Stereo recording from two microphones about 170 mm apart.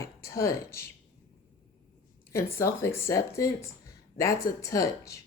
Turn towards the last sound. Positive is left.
turn(degrees=20)  # may be behind; listen again after turning